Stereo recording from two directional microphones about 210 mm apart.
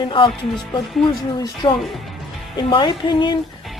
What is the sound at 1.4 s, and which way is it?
Speech, 20° left (ahead or behind).